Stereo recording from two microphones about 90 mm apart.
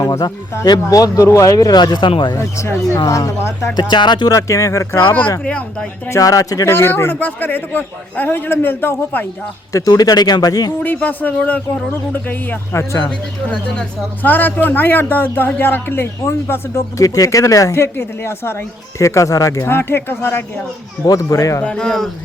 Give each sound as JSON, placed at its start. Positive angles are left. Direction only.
{"t": 0.0, "sound": "speech", "side_deg": 50}
{"t": 2.3, "sound": "speech", "side_deg": 35}
{"t": 3.8, "sound": "speech", "side_deg": 55}
{"t": 4.4, "sound": "speech", "side_deg": 35}
{"t": 5.5, "sound": "speech", "side_deg": 15}
{"t": 6.1, "sound": "speech", "side_deg": 40}
{"t": 6.7, "sound": "a man's voice", "side_deg": 25}
{"t": 9.7, "sound": "speech", "side_deg": 45}
{"t": 10.8, "sound": "a man's voice", "side_deg": 20}
{"t": 13.1, "sound": "speech", "side_deg": 10}
{"t": 14.2, "sound": "a man's voice", "side_deg": 20}
{"t": 21.1, "sound": "speech", "side_deg": 40}
{"t": 21.6, "sound": "speech", "side_deg": 10}